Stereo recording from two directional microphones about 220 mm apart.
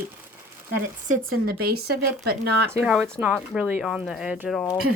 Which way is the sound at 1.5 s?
45° right (ahead or behind).